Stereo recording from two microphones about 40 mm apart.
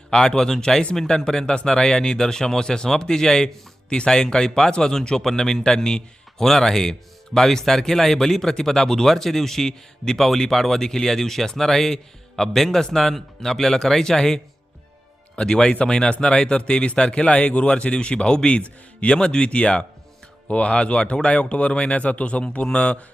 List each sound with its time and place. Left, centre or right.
0.1 s a man's voice: centre